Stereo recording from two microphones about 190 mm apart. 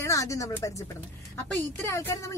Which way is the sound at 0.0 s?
15° left (ahead or behind).